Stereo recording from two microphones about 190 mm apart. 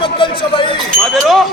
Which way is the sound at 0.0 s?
25° left (ahead or behind).